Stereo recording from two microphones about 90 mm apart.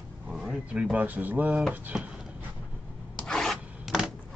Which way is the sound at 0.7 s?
15° right (ahead or behind).